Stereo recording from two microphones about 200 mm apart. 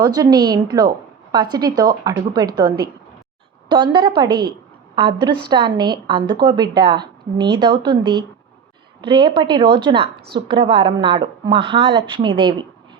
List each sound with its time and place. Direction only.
0.0 s a woman's voice: 20° right (ahead or behind)